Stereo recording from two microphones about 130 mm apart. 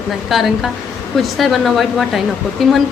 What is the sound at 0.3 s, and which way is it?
A woman's voice, centre (ahead or behind).